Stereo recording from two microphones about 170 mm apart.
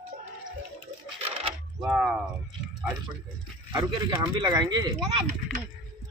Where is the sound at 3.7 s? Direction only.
25° right (ahead or behind).